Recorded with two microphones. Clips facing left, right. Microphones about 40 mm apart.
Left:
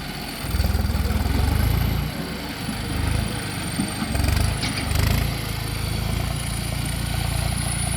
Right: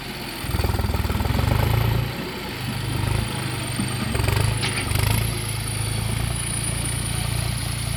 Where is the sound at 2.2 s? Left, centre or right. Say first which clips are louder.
Even; centre.